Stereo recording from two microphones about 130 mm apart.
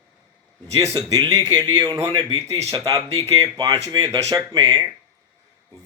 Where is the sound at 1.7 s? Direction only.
35° right (ahead or behind).